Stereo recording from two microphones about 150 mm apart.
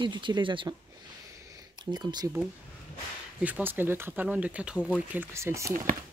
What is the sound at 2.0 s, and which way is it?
Speech, 25° right (ahead or behind).